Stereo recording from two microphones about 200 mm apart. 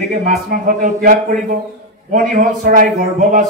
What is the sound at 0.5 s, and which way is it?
Speech, 40° right (ahead or behind).